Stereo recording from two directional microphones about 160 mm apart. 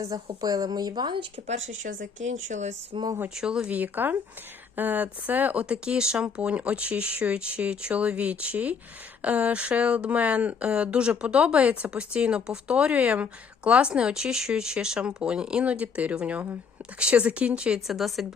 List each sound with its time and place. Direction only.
0.3 s speech: 25° right (ahead or behind)
1.5 s speech: 55° right (ahead or behind)
2.9 s speech: 25° right (ahead or behind)
3.2 s speech: 5° right (ahead or behind)